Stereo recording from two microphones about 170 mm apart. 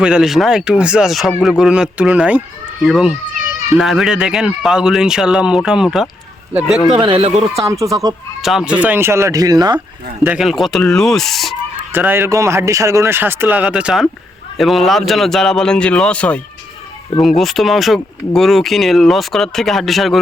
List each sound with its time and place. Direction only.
0.0 s speech: 5° right (ahead or behind)
7.0 s speech: 35° right (ahead or behind)
7.6 s speech: 20° right (ahead or behind)
8.4 s speech: centre (ahead or behind); by 9.8 s 25° right (ahead or behind)
10.2 s speech: centre (ahead or behind)
11.9 s speech: 10° right (ahead or behind)